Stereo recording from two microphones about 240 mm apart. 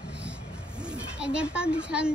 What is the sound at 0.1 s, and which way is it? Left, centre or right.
Speech, centre.